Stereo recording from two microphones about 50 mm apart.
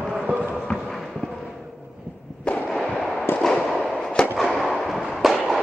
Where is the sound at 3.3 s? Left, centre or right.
Centre.